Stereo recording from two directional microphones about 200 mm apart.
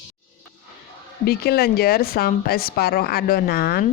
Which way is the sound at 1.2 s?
50° left (ahead or behind).